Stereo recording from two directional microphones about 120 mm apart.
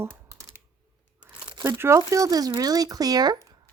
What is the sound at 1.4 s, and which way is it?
Crumpling, 40° right (ahead or behind).